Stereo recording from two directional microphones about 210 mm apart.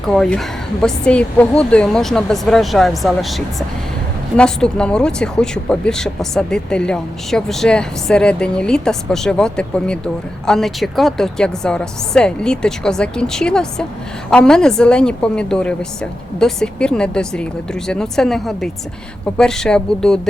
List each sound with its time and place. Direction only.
0.1 s speech: centre (ahead or behind)